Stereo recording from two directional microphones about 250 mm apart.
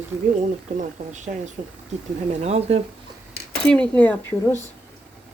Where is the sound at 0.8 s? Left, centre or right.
Right.